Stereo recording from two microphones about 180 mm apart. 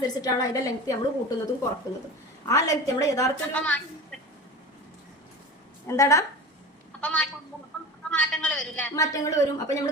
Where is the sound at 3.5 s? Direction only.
5° left (ahead or behind).